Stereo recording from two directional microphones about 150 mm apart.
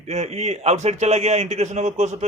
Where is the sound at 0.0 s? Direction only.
45° right (ahead or behind).